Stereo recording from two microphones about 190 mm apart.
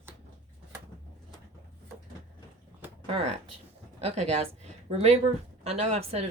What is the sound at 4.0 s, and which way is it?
Speech, 35° right (ahead or behind).